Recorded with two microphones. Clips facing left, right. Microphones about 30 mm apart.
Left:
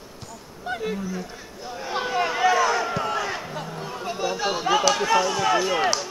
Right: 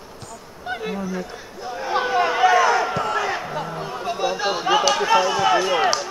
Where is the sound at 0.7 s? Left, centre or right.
Right.